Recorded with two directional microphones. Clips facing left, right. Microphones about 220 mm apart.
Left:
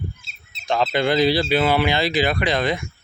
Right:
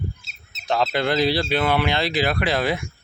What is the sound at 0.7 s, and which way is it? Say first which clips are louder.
Speech: left 2 dB; centre (ahead or behind).